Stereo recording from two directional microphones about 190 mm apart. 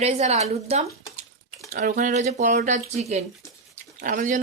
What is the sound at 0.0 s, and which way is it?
Speech, 35° right (ahead or behind).